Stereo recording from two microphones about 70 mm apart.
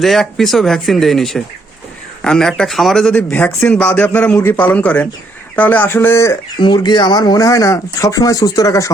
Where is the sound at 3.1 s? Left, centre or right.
Left.